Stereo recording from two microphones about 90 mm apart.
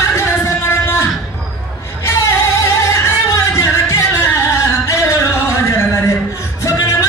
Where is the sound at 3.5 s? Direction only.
35° left (ahead or behind).